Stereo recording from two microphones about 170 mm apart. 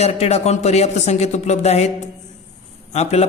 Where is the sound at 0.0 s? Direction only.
40° left (ahead or behind).